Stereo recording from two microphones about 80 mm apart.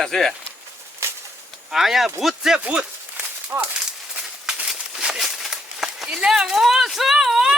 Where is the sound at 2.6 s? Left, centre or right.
Centre.